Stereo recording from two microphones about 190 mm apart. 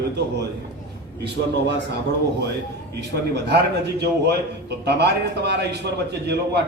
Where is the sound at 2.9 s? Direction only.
60° right (ahead or behind).